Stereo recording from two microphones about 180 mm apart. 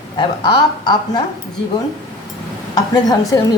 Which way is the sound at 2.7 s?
20° left (ahead or behind).